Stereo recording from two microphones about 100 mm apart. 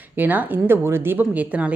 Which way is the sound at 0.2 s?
20° right (ahead or behind).